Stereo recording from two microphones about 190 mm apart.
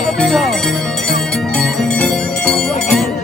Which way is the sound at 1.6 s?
Centre (ahead or behind).